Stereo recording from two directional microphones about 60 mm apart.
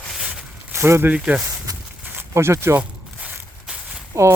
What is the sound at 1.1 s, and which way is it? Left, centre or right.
Speech, centre.